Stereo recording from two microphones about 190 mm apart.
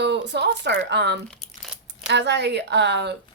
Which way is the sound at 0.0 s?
65° right (ahead or behind).